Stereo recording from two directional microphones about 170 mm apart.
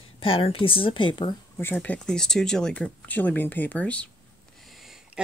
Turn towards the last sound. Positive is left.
turn(degrees=0)  # may be behind; listen again after turning